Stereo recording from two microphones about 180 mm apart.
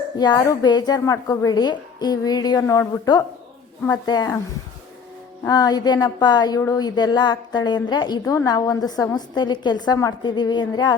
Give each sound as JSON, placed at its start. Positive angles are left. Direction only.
{"t": 0.2, "sound": "speech", "side_deg": 20}
{"t": 5.5, "sound": "speech", "side_deg": 20}